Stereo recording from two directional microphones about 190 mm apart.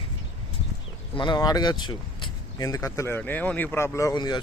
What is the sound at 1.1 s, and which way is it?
Speech, 25° left (ahead or behind).